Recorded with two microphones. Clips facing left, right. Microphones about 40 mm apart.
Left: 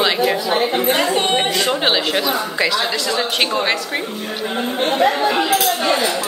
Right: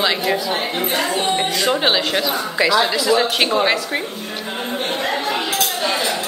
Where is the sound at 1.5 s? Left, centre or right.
Centre.